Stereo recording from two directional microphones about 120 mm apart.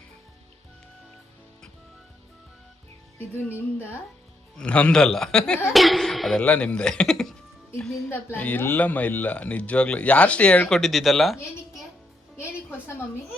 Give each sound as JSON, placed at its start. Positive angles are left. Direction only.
{"t": 3.8, "sound": "a man's voice", "side_deg": 15}
{"t": 8.1, "sound": "speech", "side_deg": 15}
{"t": 10.8, "sound": "a man's voice", "side_deg": 0}